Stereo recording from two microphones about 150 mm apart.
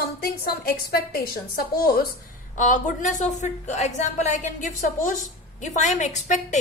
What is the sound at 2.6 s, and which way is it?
A woman's voice, 60° left (ahead or behind).